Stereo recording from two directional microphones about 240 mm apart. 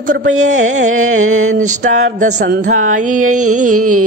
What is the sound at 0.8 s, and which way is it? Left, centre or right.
Music, right.